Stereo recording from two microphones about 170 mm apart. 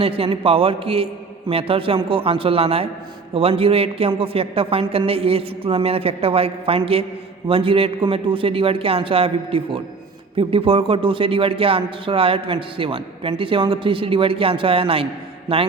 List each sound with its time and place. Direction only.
0.0 s speech: 35° right (ahead or behind)